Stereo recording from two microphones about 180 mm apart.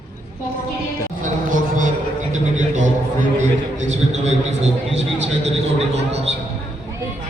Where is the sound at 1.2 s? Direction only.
45° right (ahead or behind).